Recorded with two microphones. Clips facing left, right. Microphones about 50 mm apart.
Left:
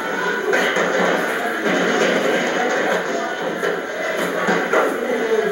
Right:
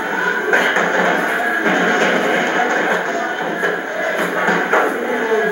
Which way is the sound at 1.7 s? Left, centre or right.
Right.